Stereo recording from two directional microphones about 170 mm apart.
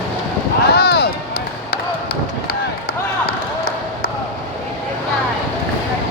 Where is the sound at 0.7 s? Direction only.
70° left (ahead or behind).